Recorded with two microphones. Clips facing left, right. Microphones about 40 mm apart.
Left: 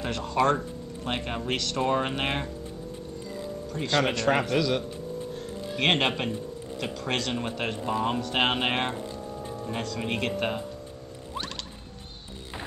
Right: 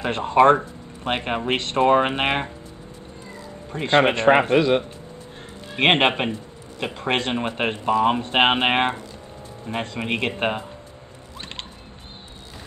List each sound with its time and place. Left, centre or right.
0.0 s speech: right
3.3 s music: right
6.8 s speech: right